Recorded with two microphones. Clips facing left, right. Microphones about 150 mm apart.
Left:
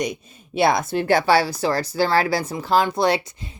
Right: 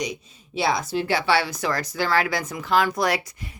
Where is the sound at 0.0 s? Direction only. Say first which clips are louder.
Left 4 dB; 55° left (ahead or behind).